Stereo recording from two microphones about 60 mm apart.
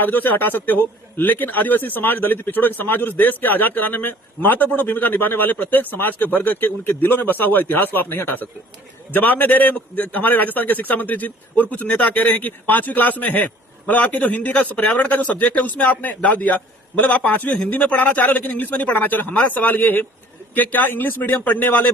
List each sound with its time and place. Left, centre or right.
0.0 s a man's voice: left